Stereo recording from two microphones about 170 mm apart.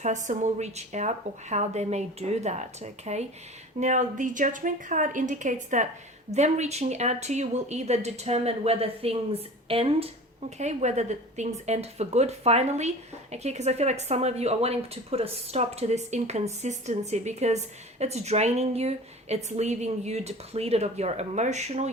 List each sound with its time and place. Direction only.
0.3 s a woman's voice: 45° right (ahead or behind)